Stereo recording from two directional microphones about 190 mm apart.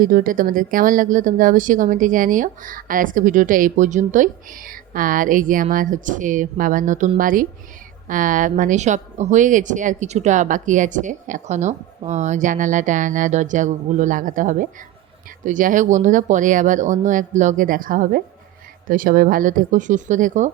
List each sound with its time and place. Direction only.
0.0 s speech: 45° right (ahead or behind)